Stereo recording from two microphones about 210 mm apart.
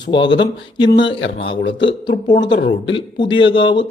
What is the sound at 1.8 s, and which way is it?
Speech, 20° left (ahead or behind).